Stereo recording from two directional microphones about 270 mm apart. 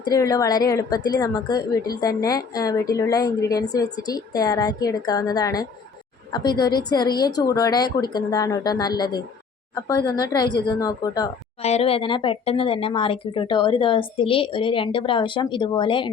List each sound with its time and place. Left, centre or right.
0.0 s a woman's voice: centre